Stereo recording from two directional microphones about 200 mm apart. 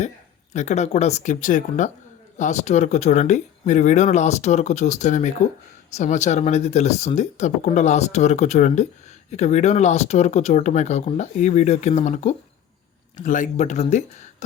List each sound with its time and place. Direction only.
0.5 s speech: 35° left (ahead or behind)